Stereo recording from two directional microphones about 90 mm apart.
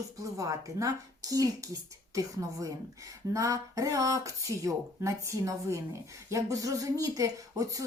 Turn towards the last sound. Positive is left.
turn(degrees=-40)  # may be behind; listen again after turning